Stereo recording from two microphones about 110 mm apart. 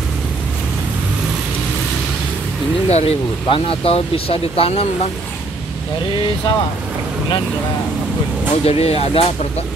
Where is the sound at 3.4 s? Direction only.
55° left (ahead or behind).